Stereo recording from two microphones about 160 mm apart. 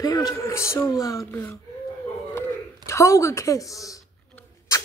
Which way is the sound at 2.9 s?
20° left (ahead or behind).